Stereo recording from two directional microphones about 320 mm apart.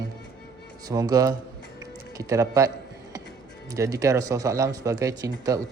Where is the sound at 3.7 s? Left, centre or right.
Centre.